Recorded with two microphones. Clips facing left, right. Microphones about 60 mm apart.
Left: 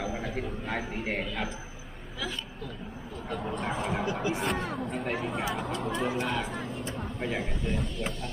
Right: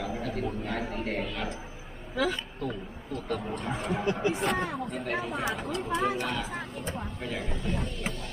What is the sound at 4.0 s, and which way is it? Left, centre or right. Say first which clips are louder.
Speech: right 2 dB; right.